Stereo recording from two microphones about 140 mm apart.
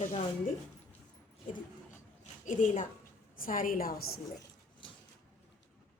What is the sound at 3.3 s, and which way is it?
Speech, 80° left.